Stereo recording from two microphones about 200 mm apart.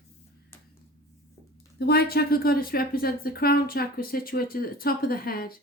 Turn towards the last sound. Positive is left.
turn(degrees=45)  # may be behind; listen again after turning